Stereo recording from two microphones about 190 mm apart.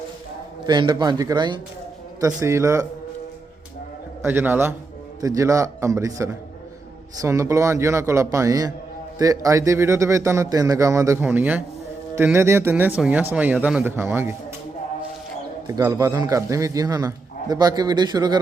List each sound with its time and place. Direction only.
0.6 s a man's voice: 25° right (ahead or behind)
4.2 s a man's voice: 10° right (ahead or behind)
15.6 s a man's voice: 20° right (ahead or behind)